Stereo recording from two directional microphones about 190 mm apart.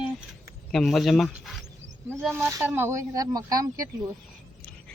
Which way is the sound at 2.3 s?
15° right (ahead or behind).